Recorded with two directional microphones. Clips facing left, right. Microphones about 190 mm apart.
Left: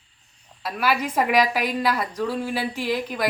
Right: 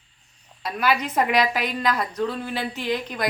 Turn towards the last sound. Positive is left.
turn(degrees=5)  # may be behind; listen again after turning